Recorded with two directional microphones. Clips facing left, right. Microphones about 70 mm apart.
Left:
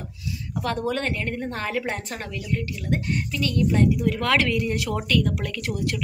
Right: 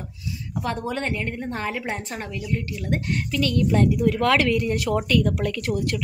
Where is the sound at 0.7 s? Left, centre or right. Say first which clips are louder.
Left 1 dB; centre.